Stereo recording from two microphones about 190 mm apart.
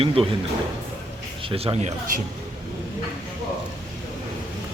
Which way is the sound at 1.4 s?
30° right (ahead or behind).